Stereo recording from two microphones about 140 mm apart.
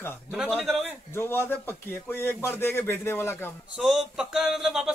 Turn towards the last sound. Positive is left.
turn(degrees=-5)  # may be behind; listen again after turning